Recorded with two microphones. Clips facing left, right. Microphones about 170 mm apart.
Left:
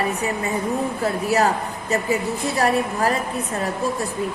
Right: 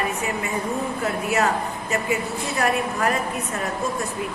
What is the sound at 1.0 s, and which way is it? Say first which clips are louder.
Speech: left 3 dB; 35° left (ahead or behind).